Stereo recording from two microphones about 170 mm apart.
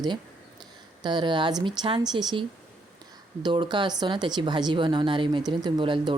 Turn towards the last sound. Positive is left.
turn(degrees=-30)  # may be behind; listen again after turning